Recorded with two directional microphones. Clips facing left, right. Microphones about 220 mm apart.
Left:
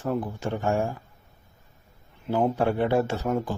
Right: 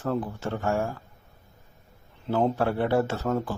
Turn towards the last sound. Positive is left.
turn(degrees=15)  # may be behind; listen again after turning